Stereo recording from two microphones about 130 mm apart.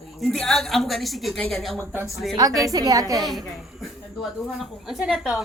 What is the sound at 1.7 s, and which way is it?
A woman's voice, 20° right (ahead or behind).